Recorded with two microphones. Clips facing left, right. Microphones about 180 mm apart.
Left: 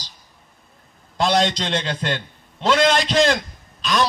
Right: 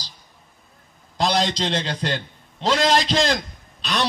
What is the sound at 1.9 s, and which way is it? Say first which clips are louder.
Speech: left 1 dB; 50° left (ahead or behind).